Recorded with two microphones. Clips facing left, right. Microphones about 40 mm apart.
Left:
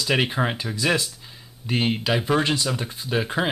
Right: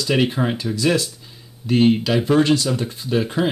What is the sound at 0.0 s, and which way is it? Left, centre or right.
Speech, centre.